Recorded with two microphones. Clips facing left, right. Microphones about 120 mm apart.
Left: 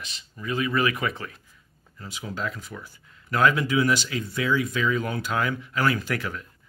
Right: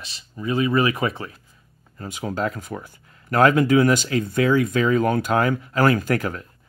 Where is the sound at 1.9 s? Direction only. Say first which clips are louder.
Right 7 dB; 50° right (ahead or behind).